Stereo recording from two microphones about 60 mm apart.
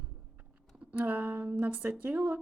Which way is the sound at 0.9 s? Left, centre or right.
Right.